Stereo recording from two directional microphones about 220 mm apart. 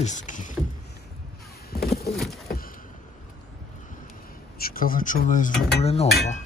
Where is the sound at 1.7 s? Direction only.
45° left (ahead or behind).